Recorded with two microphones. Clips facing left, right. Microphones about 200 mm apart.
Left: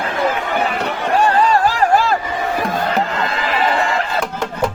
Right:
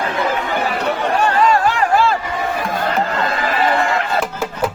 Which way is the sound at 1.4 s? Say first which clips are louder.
Even; 35° left (ahead or behind).